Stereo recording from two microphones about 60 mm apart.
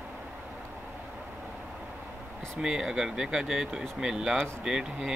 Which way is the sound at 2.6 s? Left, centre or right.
Centre.